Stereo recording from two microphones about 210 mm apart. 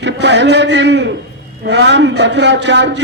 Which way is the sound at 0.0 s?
55° right (ahead or behind).